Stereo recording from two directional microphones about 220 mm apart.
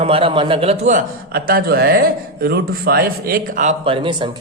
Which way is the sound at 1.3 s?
45° right (ahead or behind).